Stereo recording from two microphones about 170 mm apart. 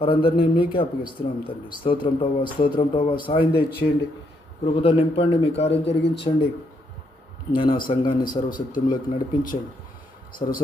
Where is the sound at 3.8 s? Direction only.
45° left (ahead or behind).